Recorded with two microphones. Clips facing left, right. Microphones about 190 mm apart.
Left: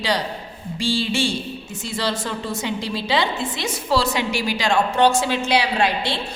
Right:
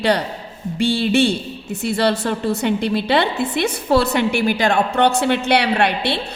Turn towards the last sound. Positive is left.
turn(degrees=-65)  # may be behind; listen again after turning